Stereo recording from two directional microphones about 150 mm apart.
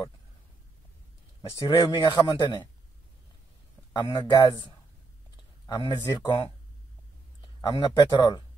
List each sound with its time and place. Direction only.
1.7 s a man's voice: 35° left (ahead or behind)
3.9 s speech: 25° left (ahead or behind)
5.3 s a sound: 30° left (ahead or behind)
5.9 s speech: 20° left (ahead or behind)
7.7 s speech: 30° left (ahead or behind)